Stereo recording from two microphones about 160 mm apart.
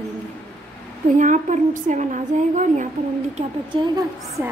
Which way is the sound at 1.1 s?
50° right (ahead or behind).